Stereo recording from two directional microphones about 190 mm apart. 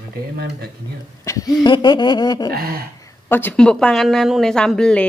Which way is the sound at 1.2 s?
15° left (ahead or behind).